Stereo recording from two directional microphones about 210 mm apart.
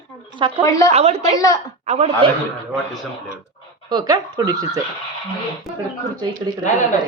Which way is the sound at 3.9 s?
20° right (ahead or behind).